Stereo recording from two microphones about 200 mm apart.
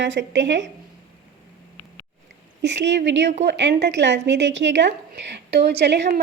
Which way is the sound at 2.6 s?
60° right (ahead or behind).